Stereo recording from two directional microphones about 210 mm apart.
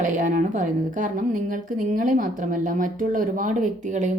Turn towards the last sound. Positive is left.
turn(degrees=-35)  # may be behind; listen again after turning